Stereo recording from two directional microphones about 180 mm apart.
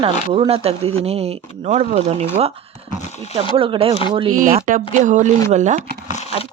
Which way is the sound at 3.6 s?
30° right (ahead or behind).